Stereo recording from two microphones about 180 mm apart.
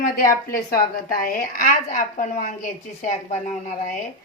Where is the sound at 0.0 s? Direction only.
55° left (ahead or behind).